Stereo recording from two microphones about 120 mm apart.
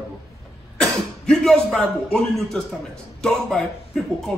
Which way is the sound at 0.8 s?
5° left (ahead or behind).